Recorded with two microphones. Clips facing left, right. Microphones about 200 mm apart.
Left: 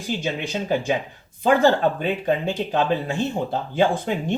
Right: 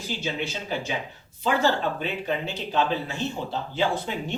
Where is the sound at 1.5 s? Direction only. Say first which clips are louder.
Left 6 dB; 50° left (ahead or behind).